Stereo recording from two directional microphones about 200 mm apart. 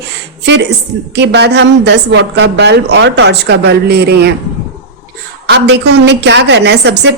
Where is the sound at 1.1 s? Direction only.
60° right (ahead or behind).